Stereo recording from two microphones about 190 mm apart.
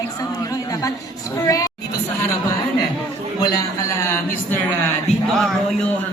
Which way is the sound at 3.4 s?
20° left (ahead or behind).